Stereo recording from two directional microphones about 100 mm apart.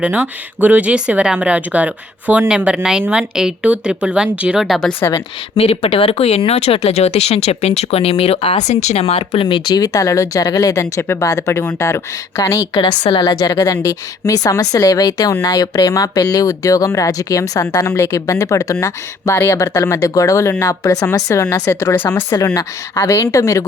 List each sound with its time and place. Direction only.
0.0 s speech: 15° right (ahead or behind)
5.0 s a woman's voice: 30° left (ahead or behind)
5.5 s speech: 75° left (ahead or behind); by 12.6 s 35° left (ahead or behind)
12.7 s a woman's voice: 55° left (ahead or behind)
13.2 s a woman's voice: 40° left (ahead or behind); by 22.2 s 20° left (ahead or behind)
22.3 s a woman's voice: 35° left (ahead or behind)